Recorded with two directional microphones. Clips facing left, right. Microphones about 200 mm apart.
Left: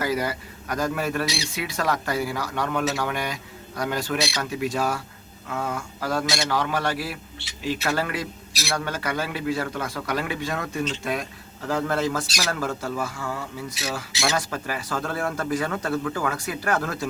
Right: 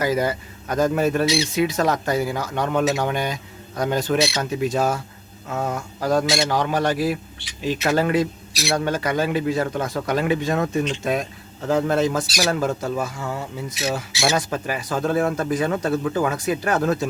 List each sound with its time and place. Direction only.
0.0 s speech: 25° right (ahead or behind)